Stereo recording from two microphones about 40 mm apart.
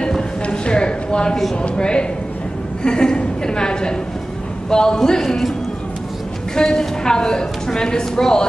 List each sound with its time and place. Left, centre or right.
0.5 s a sound: left
1.6 s a woman's voice: left
6.5 s a woman's voice: centre